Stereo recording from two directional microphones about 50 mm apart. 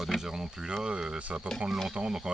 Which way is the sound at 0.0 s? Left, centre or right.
Centre.